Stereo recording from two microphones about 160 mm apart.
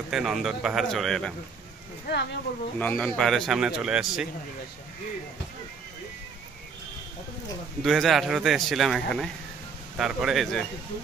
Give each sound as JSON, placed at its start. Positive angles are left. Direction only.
{"t": 0.1, "sound": "a man's voice", "side_deg": 0}
{"t": 2.1, "sound": "speech", "side_deg": 90}
{"t": 2.8, "sound": "a man's voice", "side_deg": 10}
{"t": 7.8, "sound": "a man's voice", "side_deg": 0}